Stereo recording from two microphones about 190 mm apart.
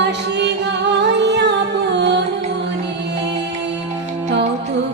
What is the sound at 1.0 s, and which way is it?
Music, 65° right (ahead or behind).